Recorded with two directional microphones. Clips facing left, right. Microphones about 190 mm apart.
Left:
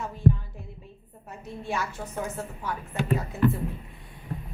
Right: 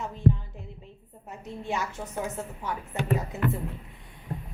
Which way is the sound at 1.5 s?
20° right (ahead or behind).